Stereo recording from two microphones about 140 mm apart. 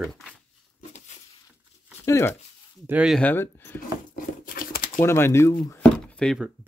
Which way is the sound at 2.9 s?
5° right (ahead or behind).